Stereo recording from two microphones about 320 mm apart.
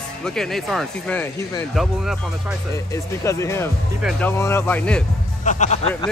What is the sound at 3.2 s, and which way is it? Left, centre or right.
Speech, centre.